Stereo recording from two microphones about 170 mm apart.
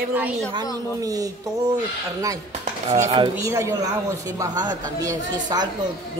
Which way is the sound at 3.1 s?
20° right (ahead or behind).